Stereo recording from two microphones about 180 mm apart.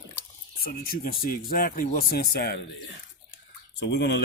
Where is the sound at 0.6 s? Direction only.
55° left (ahead or behind).